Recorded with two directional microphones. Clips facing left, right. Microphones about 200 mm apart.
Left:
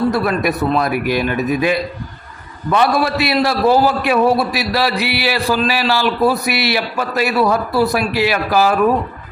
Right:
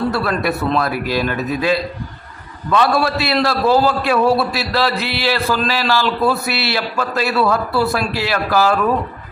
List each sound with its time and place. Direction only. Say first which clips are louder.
0.1 s a man's voice: left 2 dB; 20° left (ahead or behind)